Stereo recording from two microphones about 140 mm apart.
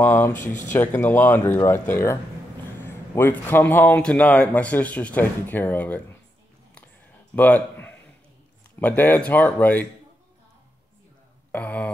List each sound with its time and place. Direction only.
0.0 s a man's voice: 15° left (ahead or behind)
7.3 s a man's voice: 10° left (ahead or behind)
11.5 s speech: 10° left (ahead or behind)